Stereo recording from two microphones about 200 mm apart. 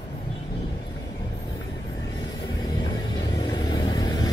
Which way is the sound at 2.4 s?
20° left (ahead or behind).